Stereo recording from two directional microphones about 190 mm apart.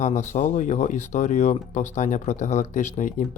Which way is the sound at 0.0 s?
40° left (ahead or behind).